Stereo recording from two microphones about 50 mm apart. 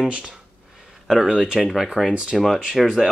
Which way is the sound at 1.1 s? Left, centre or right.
Centre.